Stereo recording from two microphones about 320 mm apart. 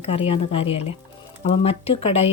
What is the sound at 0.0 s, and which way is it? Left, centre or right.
Speech, centre.